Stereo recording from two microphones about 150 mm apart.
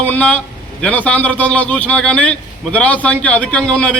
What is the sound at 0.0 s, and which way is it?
A man's voice, 10° left (ahead or behind).